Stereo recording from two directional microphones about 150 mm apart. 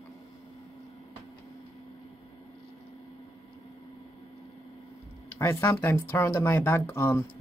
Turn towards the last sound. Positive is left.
turn(degrees=15)  # may be behind; listen again after turning